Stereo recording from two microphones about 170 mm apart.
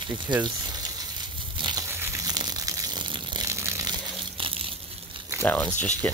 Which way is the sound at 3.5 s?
15° right (ahead or behind).